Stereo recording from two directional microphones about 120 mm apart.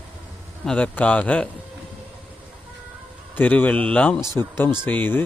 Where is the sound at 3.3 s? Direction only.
15° left (ahead or behind).